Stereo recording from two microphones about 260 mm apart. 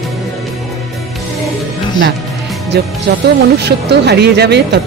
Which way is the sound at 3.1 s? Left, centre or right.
Right.